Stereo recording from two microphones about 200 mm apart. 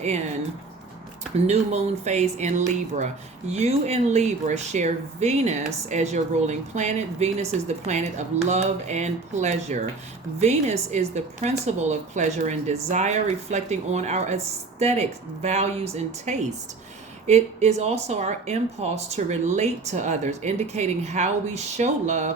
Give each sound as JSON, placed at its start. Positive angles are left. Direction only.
{"t": 1.5, "sound": "speech", "side_deg": -35}